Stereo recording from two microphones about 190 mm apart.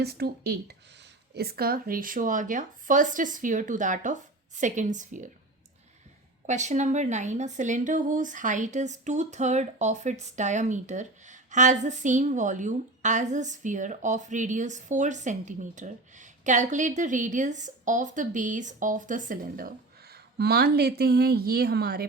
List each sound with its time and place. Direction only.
0.0 s speech: 55° right (ahead or behind); by 5.3 s 40° right (ahead or behind)
6.4 s speech: 40° right (ahead or behind); by 22.0 s 55° right (ahead or behind)